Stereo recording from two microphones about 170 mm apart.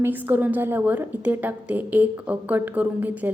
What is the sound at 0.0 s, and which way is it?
A woman's voice, 10° right (ahead or behind).